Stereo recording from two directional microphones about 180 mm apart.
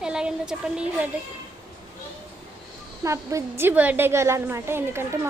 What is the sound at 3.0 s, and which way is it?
A woman's voice, 15° right (ahead or behind).